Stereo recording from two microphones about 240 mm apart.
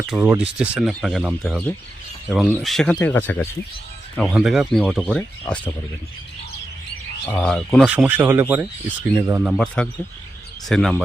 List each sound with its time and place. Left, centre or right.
0.1 s speech: centre
7.3 s speech: centre